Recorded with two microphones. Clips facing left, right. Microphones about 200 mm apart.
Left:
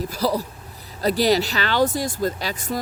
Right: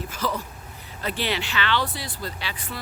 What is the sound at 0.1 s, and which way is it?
Speech, 35° left (ahead or behind).